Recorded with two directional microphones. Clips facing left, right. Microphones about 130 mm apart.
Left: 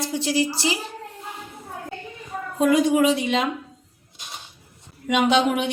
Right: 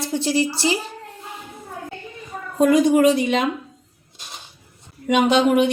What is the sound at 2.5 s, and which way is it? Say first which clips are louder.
Speech: right 3 dB; 45° right (ahead or behind).